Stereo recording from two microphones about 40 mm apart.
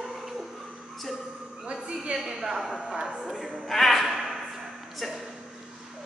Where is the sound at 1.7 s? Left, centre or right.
Right.